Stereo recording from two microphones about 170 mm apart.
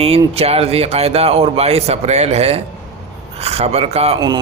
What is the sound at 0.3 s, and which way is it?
A man's voice, 35° right (ahead or behind).